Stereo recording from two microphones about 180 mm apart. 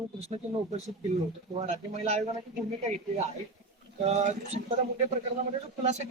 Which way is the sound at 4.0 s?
40° right (ahead or behind).